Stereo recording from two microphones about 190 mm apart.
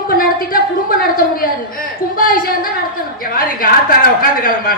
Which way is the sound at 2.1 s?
50° left (ahead or behind).